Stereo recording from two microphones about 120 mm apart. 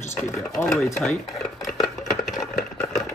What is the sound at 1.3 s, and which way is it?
Dishes, centre (ahead or behind).